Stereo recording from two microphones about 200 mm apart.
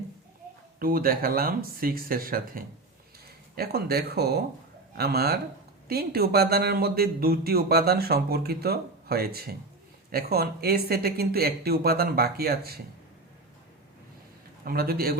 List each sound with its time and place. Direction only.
0.8 s speech: 45° right (ahead or behind)
14.6 s speech: 50° right (ahead or behind)